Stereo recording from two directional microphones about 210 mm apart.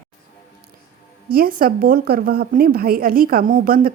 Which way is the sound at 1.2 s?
45° right (ahead or behind).